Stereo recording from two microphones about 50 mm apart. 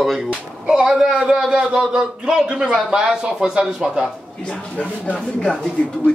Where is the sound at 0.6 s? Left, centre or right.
Centre.